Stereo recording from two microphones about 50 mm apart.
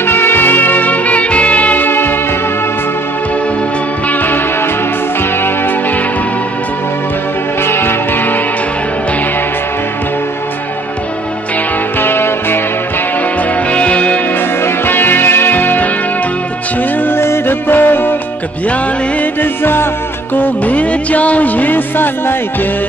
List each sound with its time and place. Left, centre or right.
0.0 s music: left
1.9 s music: left
4.1 s music: left
7.6 s music: left
12.0 s music: left
13.7 s music: left
14.9 s music: left
17.0 s music: left
19.4 s music: left
20.3 s music: left